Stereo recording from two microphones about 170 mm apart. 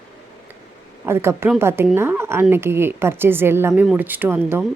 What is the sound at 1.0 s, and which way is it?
Speech, 15° right (ahead or behind).